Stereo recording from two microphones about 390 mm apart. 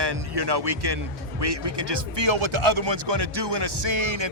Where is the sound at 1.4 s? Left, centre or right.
Right.